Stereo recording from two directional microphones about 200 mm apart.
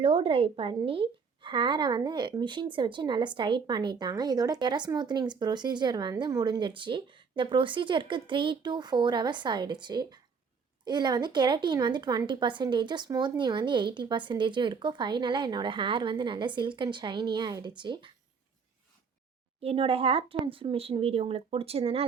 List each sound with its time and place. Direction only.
0.0 s a woman's voice: 25° right (ahead or behind)
19.6 s a woman's voice: 30° right (ahead or behind)